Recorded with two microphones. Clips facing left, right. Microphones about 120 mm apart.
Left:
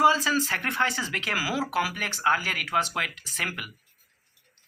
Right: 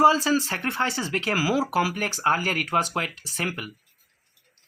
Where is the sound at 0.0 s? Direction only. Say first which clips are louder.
Right 3 dB; 35° right (ahead or behind).